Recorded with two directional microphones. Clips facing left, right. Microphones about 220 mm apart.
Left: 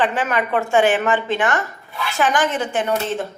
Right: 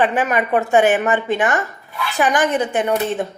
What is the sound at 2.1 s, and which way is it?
Speech, 20° right (ahead or behind).